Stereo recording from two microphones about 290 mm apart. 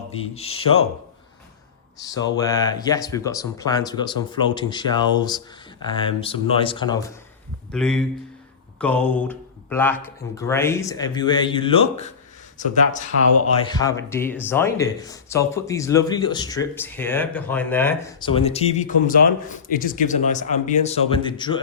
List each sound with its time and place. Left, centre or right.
0.3 s a man's voice: left
2.3 s speech: centre
7.7 s a man's voice: centre; by 13.1 s left
13.7 s speech: centre
18.3 s a man's voice: centre